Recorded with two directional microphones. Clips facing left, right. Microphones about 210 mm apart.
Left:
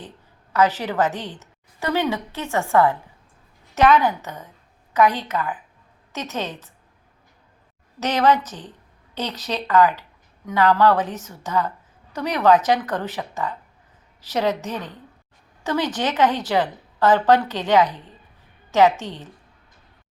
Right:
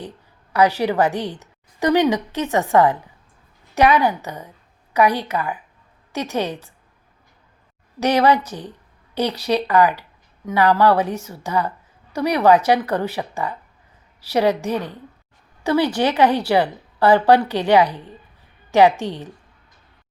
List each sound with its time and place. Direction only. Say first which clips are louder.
0.5 s speech: right 3 dB; 10° right (ahead or behind)
7.9 s speech: right 3 dB; 10° right (ahead or behind)